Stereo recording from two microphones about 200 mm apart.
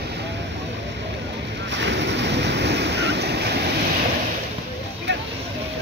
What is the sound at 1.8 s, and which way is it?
Waves, 60° right (ahead or behind).